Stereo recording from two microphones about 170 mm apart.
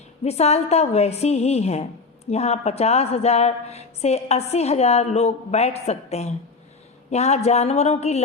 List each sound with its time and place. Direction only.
0.3 s a woman's voice: 40° left (ahead or behind)